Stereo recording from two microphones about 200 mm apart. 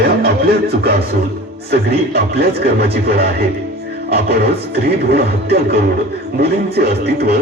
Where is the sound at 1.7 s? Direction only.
55° right (ahead or behind).